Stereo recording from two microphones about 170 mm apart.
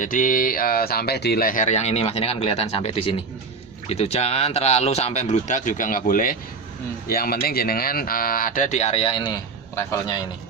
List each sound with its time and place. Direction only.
0.0 s speech: 50° left (ahead or behind); by 10.2 s 20° left (ahead or behind)